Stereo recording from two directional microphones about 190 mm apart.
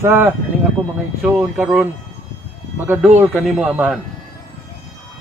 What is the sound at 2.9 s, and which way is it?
Speech, 10° right (ahead or behind).